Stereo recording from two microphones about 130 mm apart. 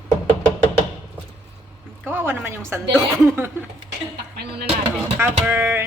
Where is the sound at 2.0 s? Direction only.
15° right (ahead or behind).